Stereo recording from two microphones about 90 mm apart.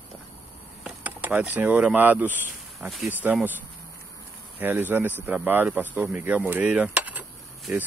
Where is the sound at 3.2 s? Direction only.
20° right (ahead or behind).